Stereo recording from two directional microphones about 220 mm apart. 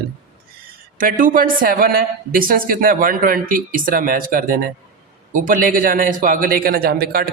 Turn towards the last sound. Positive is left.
turn(degrees=-45)  # may be behind; listen again after turning